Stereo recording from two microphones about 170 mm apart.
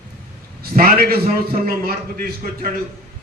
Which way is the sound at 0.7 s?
55° right (ahead or behind).